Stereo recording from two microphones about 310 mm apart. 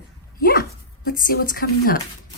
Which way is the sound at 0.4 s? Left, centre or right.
Left.